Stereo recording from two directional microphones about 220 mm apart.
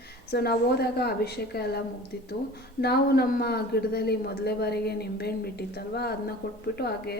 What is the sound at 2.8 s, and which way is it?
A man's voice, 45° left (ahead or behind).